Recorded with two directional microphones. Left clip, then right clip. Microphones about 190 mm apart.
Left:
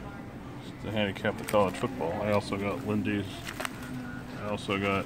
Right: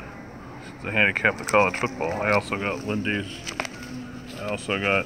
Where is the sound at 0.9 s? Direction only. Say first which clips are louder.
Right 11 dB; 5° left (ahead or behind).